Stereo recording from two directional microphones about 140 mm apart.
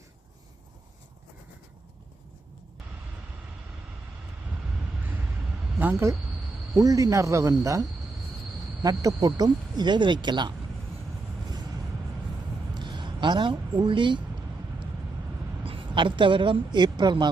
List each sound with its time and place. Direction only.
5.8 s speech: 15° right (ahead or behind); by 10.5 s 30° right (ahead or behind)
12.7 s a sound: 35° right (ahead or behind)
15.6 s speech: 40° right (ahead or behind)